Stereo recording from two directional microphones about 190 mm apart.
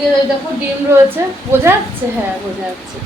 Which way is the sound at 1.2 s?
15° right (ahead or behind).